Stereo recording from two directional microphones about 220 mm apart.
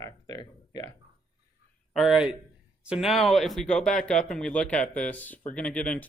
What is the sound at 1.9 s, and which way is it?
Speech, centre (ahead or behind).